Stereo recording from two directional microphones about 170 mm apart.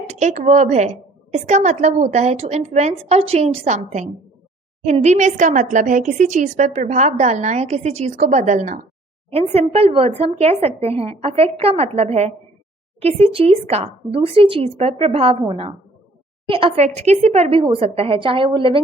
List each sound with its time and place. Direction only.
0.1 s a woman's voice: 45° right (ahead or behind)